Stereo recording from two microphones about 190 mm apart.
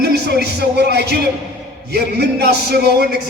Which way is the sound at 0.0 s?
60° right (ahead or behind).